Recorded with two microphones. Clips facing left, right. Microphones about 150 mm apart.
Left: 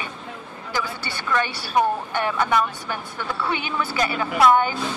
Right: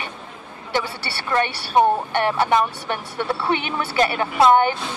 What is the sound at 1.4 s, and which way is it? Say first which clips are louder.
Speech: right 1 dB; 70° right (ahead or behind).